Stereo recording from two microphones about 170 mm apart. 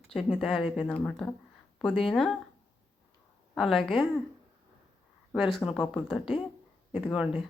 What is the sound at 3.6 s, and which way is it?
Speech, centre (ahead or behind).